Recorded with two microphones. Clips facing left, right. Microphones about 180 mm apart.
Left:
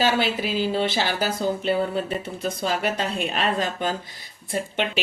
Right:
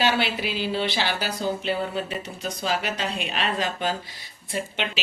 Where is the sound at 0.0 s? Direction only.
40° left (ahead or behind).